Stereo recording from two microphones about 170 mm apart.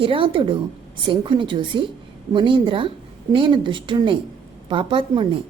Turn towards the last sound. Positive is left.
turn(degrees=-30)  # may be behind; listen again after turning